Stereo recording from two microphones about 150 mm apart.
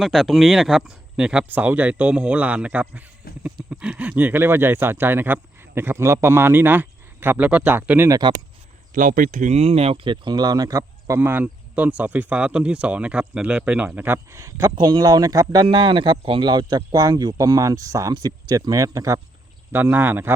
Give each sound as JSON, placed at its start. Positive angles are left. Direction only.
{"t": 0.0, "sound": "speech", "side_deg": 0}
{"t": 8.9, "sound": "speech", "side_deg": -65}